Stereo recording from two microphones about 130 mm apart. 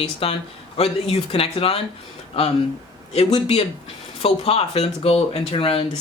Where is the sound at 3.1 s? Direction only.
55° left (ahead or behind).